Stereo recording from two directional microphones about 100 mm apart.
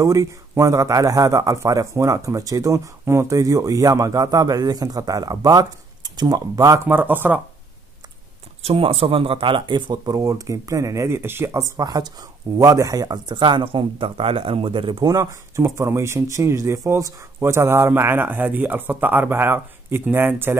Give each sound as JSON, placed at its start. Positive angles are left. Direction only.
{"t": 0.0, "sound": "a man's voice", "side_deg": -35}
{"t": 6.9, "sound": "speech", "side_deg": -20}
{"t": 8.6, "sound": "speech", "side_deg": -70}
{"t": 15.0, "sound": "speech", "side_deg": -30}